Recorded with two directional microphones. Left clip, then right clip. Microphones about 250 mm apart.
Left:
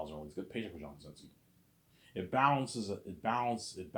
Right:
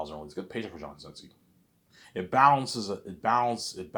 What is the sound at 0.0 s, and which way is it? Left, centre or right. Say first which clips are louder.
Speech: right 6 dB; right.